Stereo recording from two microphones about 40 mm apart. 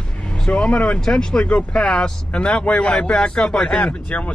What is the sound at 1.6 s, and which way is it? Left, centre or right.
Speech, left.